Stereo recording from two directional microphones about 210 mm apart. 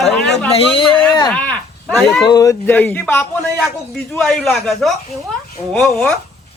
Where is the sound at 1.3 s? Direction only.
5° left (ahead or behind).